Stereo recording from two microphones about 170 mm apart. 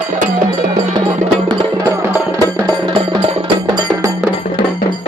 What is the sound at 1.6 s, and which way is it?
Music, 20° right (ahead or behind).